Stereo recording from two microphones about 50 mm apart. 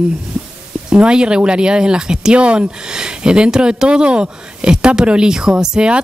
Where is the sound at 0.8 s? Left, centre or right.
Centre.